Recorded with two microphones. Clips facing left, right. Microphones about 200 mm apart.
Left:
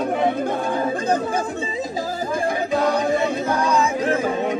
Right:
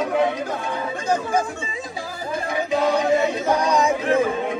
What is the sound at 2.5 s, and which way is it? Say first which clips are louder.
Music: right 3 dB; 50° left (ahead or behind).